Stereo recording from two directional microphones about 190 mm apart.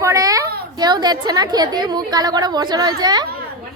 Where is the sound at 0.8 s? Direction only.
20° right (ahead or behind).